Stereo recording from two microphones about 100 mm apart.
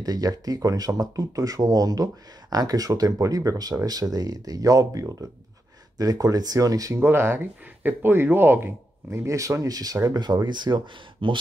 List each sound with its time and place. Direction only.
0.0 s speech: 40° right (ahead or behind)
7.0 s speech: 25° right (ahead or behind); by 11.3 s 55° right (ahead or behind)